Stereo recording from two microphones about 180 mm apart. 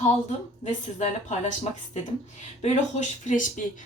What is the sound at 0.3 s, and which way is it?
A woman's voice, 40° left (ahead or behind).